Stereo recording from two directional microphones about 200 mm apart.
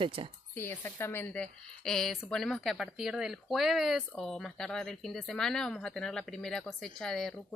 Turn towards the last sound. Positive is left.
turn(degrees=0)  # may be behind; listen again after turning